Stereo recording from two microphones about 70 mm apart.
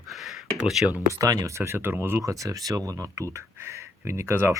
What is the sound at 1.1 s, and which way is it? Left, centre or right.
Speech, right.